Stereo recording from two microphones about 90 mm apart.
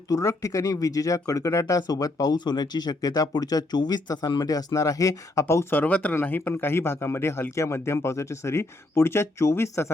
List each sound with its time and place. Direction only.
0.1 s speech: 40° left (ahead or behind)
4.4 s speech: 40° left (ahead or behind)
5.8 s speech: 20° left (ahead or behind)